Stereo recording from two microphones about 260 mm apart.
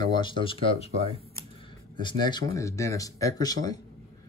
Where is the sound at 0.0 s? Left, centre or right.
Centre.